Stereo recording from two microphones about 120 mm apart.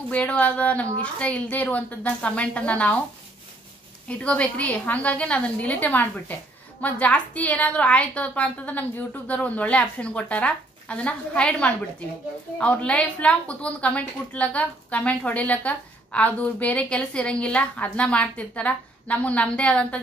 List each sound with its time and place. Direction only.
0.1 s a woman's voice: 10° left (ahead or behind)
4.1 s a woman's voice: 10° left (ahead or behind)